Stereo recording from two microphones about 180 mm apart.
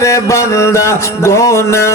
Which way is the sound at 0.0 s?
15° left (ahead or behind).